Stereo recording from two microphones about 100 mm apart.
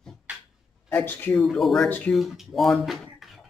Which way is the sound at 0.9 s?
20° left (ahead or behind).